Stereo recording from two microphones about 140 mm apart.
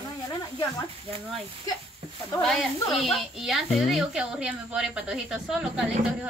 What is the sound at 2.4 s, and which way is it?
Speech, centre (ahead or behind).